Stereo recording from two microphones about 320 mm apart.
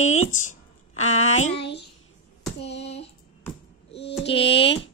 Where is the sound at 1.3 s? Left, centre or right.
Left.